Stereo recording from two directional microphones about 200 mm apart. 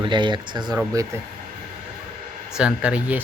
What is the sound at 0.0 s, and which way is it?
Speech, 25° right (ahead or behind).